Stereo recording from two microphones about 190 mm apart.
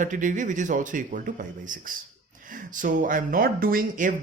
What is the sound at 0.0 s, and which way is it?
A man's voice, 45° right (ahead or behind).